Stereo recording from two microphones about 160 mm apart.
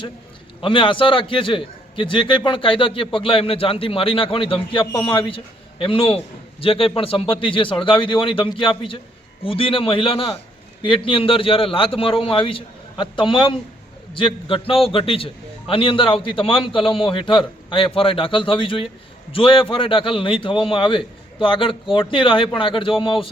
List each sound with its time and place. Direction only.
0.6 s a man's voice: 30° left (ahead or behind)